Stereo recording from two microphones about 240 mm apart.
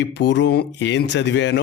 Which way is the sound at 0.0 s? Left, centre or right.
Left.